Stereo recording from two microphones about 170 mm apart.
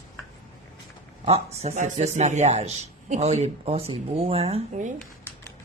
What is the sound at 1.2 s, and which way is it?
A man's voice, 35° right (ahead or behind).